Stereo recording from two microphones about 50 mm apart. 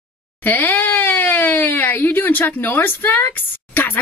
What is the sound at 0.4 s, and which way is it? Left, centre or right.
Speech, left.